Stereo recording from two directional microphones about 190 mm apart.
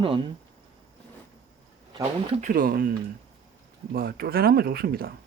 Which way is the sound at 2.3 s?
45° right (ahead or behind).